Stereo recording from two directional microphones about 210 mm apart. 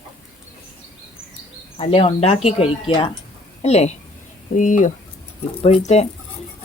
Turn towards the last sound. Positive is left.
turn(degrees=30)  # may be behind; listen again after turning